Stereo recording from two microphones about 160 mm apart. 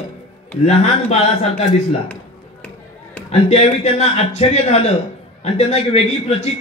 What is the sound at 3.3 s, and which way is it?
A man's voice, 40° left (ahead or behind).